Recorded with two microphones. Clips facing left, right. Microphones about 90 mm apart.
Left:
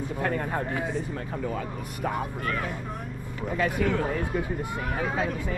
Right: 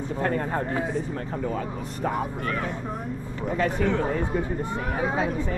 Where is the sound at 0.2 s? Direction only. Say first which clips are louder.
Right 2 dB; 20° right (ahead or behind).